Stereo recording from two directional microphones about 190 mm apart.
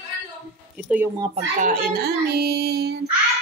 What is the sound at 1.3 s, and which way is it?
Child singing, 45° right (ahead or behind).